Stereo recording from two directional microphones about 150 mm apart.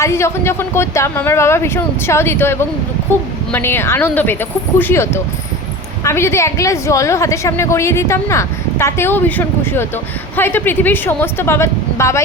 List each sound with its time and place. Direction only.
0.0 s a woman's voice: 20° left (ahead or behind)